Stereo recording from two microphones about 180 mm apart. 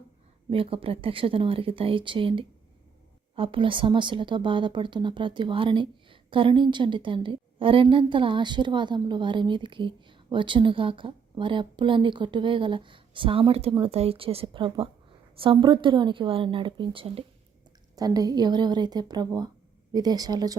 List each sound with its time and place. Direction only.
0.5 s speech: 30° right (ahead or behind)
17.9 s speech: 20° right (ahead or behind)